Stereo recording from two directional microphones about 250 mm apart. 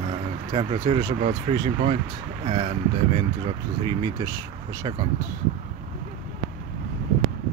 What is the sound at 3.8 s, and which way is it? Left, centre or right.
Speech, centre.